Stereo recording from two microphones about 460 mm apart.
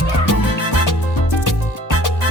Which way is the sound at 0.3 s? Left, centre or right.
Left.